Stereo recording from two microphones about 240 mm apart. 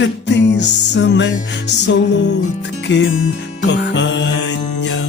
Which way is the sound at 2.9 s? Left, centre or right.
Left.